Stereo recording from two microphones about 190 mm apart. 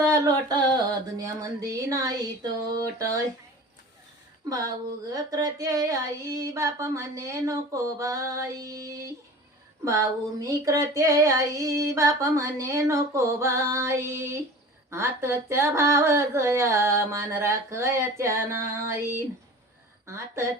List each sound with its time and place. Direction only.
0.0 s a sound: 20° right (ahead or behind)
1.2 s female singing: 20° right (ahead or behind)
4.4 s speech: 20° right (ahead or behind)
5.1 s female singing: 20° right (ahead or behind)